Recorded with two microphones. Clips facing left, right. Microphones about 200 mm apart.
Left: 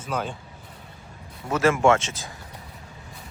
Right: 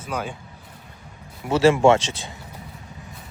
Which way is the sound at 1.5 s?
30° right (ahead or behind).